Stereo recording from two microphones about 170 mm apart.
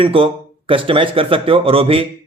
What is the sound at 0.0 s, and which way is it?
A man's voice, 30° right (ahead or behind).